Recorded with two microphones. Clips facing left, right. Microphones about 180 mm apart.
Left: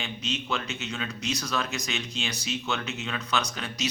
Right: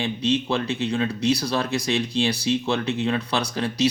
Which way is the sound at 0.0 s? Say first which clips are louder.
Right 11 dB; 30° right (ahead or behind).